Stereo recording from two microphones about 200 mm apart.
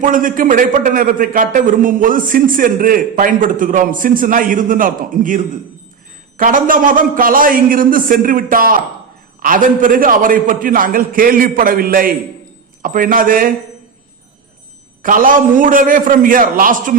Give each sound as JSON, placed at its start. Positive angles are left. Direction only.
{"t": 0.0, "sound": "a man's voice", "side_deg": -40}
{"t": 15.0, "sound": "a man's voice", "side_deg": -45}